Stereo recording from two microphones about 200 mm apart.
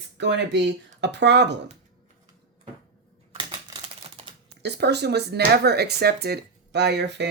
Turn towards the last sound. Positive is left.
turn(degrees=-55)  # may be behind; listen again after turning